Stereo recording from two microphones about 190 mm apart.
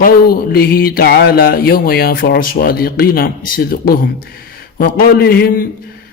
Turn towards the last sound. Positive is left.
turn(degrees=55)  # may be behind; listen again after turning